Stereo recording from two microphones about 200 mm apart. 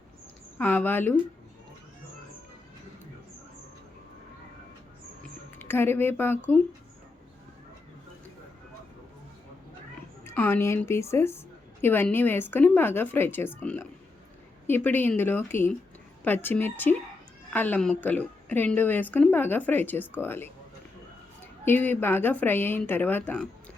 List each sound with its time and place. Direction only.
0.6 s a woman's voice: 10° left (ahead or behind)
5.5 s speech: 10° left (ahead or behind)
10.2 s a woman's voice: 10° left (ahead or behind)
21.6 s a woman's voice: 10° left (ahead or behind)